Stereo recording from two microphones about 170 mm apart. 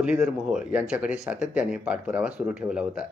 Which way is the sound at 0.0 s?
5° right (ahead or behind).